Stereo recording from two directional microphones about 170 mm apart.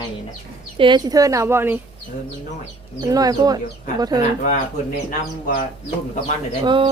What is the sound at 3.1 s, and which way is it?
Speech, 20° right (ahead or behind).